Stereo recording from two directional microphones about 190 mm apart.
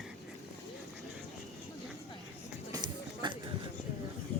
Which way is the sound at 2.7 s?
20° right (ahead or behind).